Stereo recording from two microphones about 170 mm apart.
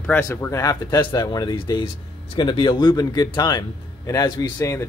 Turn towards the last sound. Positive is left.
turn(degrees=15)  # may be behind; listen again after turning